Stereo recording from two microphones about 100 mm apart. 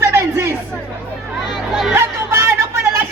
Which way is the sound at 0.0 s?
25° right (ahead or behind).